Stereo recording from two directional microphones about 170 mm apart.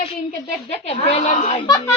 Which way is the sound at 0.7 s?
35° left (ahead or behind).